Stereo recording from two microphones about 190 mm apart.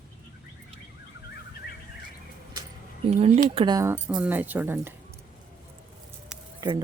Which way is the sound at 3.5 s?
20° right (ahead or behind).